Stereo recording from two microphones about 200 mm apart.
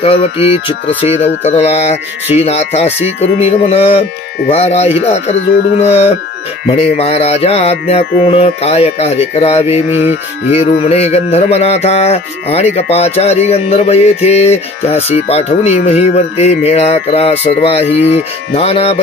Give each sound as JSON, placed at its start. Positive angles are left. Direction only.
{"t": 0.0, "sound": "music", "side_deg": 30}
{"t": 9.8, "sound": "music", "side_deg": -10}
{"t": 10.5, "sound": "music", "side_deg": 30}